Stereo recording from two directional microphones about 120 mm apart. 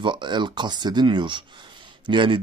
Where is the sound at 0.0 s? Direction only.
40° right (ahead or behind).